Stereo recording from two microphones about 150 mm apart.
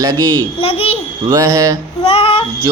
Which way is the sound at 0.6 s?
40° left (ahead or behind).